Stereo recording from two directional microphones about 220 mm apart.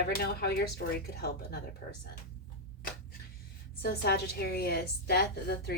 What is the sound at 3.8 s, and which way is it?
Speech, 45° left (ahead or behind).